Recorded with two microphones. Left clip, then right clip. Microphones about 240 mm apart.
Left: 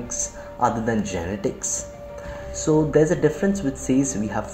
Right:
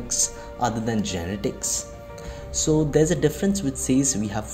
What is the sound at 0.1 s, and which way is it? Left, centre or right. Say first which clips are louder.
Speech: right 7 dB; right.